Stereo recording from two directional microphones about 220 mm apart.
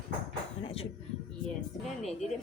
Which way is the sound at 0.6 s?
25° left (ahead or behind).